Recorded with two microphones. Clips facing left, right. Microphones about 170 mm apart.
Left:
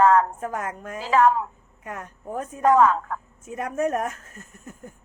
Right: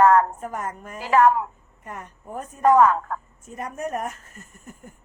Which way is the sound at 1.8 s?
50° left (ahead or behind).